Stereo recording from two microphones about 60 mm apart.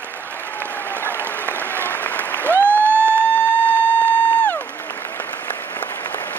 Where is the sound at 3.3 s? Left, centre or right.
Left.